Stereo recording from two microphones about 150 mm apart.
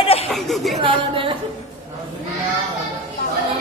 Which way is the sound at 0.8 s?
35° right (ahead or behind).